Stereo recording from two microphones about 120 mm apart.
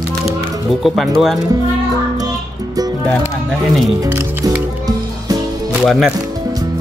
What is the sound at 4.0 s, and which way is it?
Speech, 20° right (ahead or behind).